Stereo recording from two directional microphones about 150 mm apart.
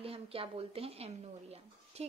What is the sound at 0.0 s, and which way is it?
A woman's voice, 40° right (ahead or behind).